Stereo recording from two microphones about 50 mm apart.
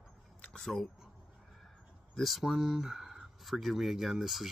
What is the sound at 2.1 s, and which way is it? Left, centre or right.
Speech, centre.